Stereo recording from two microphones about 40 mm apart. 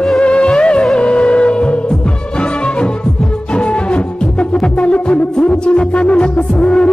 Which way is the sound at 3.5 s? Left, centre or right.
Left.